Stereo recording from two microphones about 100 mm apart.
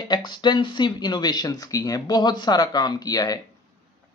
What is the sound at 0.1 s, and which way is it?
Speech, 45° left (ahead or behind).